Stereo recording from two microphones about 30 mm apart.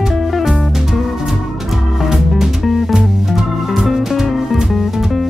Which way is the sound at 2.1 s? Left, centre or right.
Centre.